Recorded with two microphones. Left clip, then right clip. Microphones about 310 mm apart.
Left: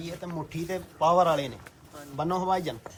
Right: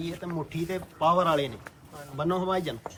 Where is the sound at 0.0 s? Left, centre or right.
Centre.